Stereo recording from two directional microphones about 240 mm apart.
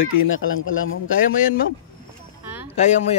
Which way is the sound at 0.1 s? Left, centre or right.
Left.